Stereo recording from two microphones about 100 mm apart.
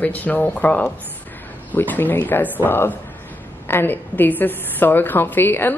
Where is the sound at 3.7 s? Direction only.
20° left (ahead or behind).